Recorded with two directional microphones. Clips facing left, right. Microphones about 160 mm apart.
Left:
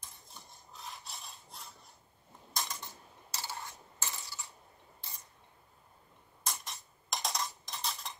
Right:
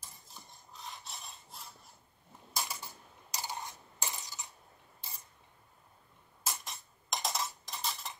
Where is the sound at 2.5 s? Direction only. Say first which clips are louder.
Right 1 dB; 10° right (ahead or behind).